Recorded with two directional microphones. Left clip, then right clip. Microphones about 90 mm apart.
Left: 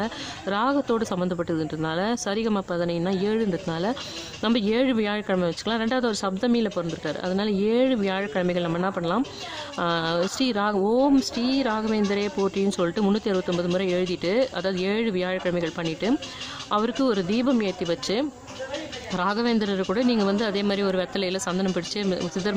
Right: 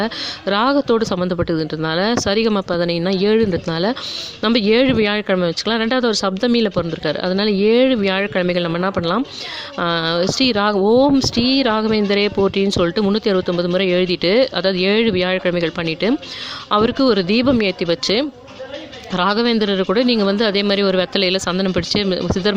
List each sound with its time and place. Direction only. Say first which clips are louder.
0.0 s speech: right 8 dB; 35° right (ahead or behind)
12.6 s speech: right 7 dB; 30° right (ahead or behind)